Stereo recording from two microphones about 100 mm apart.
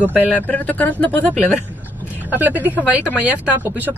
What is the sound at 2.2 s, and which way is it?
Speech, 20° right (ahead or behind).